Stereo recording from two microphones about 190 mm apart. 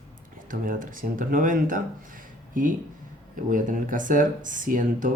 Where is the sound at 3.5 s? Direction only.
45° right (ahead or behind).